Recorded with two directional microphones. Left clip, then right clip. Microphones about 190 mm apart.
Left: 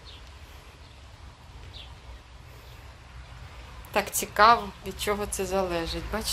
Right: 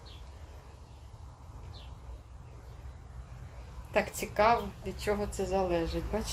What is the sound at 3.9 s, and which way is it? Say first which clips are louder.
A woman's voice: left 4 dB; 5° left (ahead or behind).